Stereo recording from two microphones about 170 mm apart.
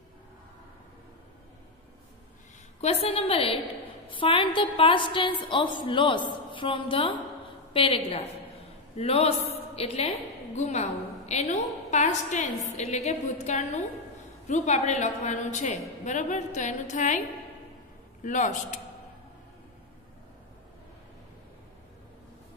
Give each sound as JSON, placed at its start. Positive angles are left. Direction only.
{"t": 2.8, "sound": "a woman's voice", "side_deg": 35}
{"t": 18.2, "sound": "a woman's voice", "side_deg": 45}